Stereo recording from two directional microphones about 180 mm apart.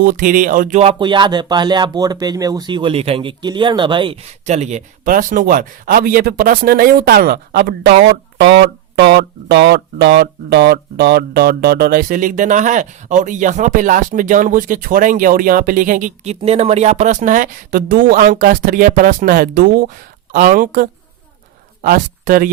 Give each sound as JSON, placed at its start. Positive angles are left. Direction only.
{"t": 0.0, "sound": "speech", "side_deg": -50}